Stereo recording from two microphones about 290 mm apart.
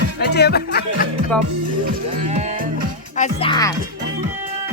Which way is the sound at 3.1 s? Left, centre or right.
Left.